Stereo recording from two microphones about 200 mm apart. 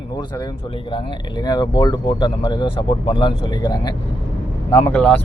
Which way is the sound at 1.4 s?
20° left (ahead or behind).